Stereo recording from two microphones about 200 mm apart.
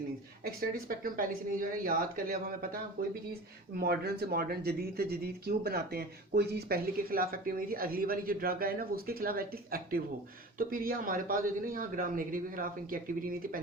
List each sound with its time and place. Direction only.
0.4 s speech: 45° right (ahead or behind)